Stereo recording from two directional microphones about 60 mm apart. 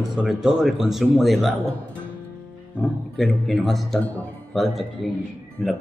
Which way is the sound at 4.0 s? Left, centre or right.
Left.